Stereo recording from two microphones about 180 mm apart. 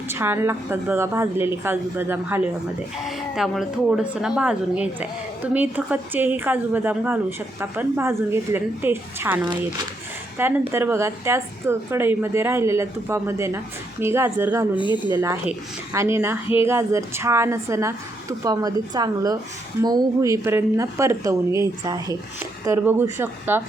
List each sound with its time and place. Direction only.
0.1 s a woman's voice: 15° right (ahead or behind)
10.7 s a woman's voice: 15° right (ahead or behind)
14.8 s speech: 25° left (ahead or behind)
15.2 s a woman's voice: 15° right (ahead or behind)